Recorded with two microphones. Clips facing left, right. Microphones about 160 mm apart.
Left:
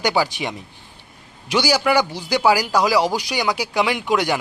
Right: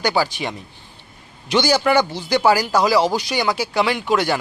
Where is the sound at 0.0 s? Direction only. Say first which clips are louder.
Even; 20° left (ahead or behind).